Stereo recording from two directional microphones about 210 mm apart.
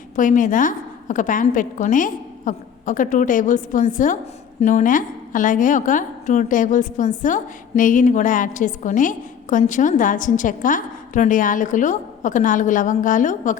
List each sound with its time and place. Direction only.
0.2 s a woman's voice: 40° left (ahead or behind)